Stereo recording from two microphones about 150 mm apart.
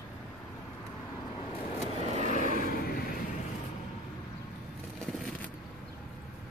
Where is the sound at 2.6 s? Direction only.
80° left.